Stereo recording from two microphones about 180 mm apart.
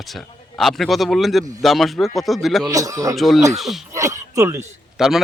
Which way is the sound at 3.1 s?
Centre (ahead or behind).